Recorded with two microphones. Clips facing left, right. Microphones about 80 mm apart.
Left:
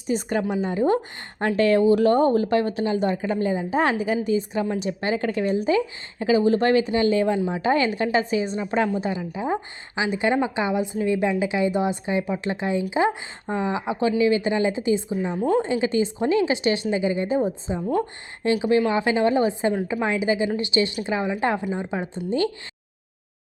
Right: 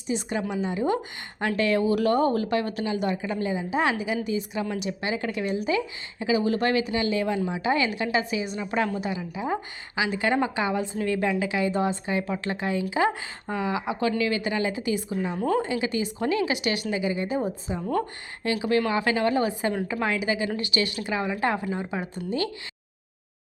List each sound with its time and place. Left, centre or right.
0.1 s a woman's voice: left
17.7 s speech: centre
18.4 s a woman's voice: left